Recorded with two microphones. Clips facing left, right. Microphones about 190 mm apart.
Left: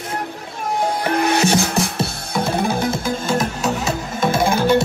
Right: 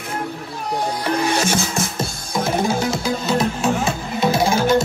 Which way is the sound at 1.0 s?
60° left (ahead or behind).